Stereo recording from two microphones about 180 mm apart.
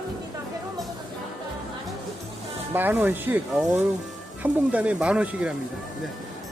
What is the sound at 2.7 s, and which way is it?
Speech, 10° right (ahead or behind).